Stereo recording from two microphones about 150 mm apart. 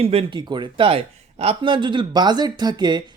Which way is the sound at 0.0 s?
40° right (ahead or behind).